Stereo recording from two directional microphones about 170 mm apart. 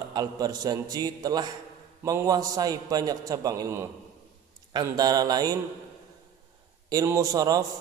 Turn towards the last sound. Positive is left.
turn(degrees=-20)  # may be behind; listen again after turning